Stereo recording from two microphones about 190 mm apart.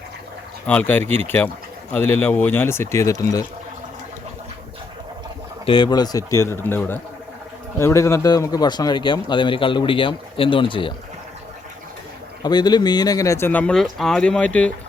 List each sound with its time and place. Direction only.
0.7 s speech: 10° left (ahead or behind)
5.6 s speech: 25° left (ahead or behind)
12.4 s speech: 20° left (ahead or behind)